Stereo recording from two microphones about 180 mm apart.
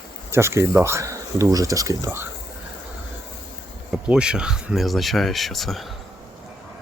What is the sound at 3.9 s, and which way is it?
Speech, 5° right (ahead or behind).